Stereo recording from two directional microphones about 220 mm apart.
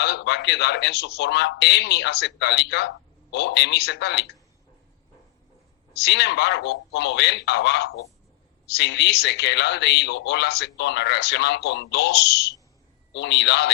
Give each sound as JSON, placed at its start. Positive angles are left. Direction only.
{"t": 0.0, "sound": "speech", "side_deg": 50}
{"t": 5.9, "sound": "speech", "side_deg": 50}